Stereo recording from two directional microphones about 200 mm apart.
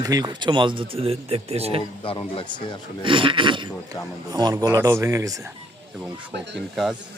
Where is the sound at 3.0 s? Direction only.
25° right (ahead or behind).